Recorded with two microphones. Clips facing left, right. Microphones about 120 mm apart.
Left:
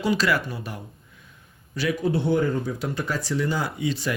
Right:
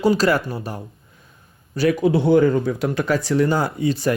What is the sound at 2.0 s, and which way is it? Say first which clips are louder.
Speech: right 7 dB; 90° right.